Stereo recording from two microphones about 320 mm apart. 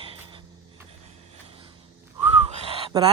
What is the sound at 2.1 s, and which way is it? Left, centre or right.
Owl, centre.